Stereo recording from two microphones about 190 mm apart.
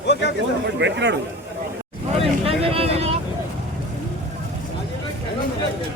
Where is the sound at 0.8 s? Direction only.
65° right (ahead or behind).